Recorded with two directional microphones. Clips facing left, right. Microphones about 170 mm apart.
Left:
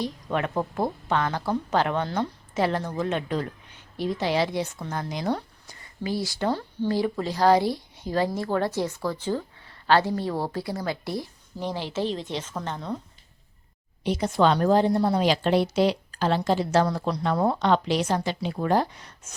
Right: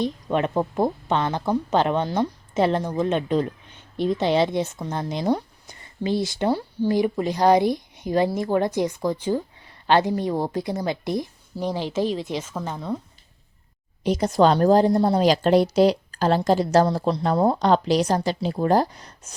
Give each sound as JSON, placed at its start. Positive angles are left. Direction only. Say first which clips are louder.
{"t": 0.0, "sound": "speech", "louder": "right 4 dB", "side_deg": -20}
{"t": 14.0, "sound": "a woman's voice", "louder": "right 4 dB", "side_deg": -40}
{"t": 16.8, "sound": "speech", "louder": "right 4 dB", "side_deg": -30}
{"t": 17.6, "sound": "a woman's voice", "louder": "right 4 dB", "side_deg": -40}